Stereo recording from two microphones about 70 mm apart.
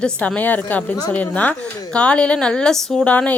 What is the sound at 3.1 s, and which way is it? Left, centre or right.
Speech, centre.